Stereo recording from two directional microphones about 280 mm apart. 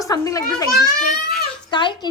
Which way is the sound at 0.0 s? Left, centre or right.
Centre.